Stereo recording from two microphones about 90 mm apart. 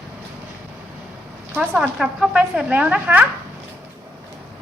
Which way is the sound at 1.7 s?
10° right (ahead or behind).